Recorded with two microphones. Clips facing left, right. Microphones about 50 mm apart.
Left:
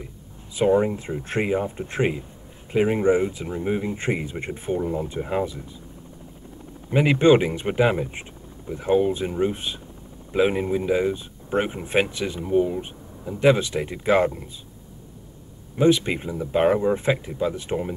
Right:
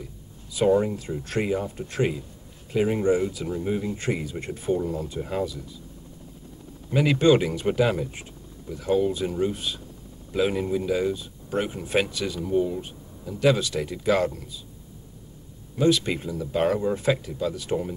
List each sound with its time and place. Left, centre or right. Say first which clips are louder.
0.6 s speech: left 1 dB; left
6.9 s speech: left 3 dB; left
15.7 s speech: left 3 dB; left